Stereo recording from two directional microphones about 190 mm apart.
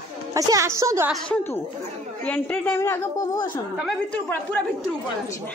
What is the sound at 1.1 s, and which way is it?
A woman's voice, centre (ahead or behind).